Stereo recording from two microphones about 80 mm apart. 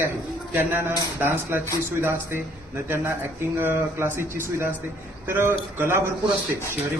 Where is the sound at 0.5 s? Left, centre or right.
Right.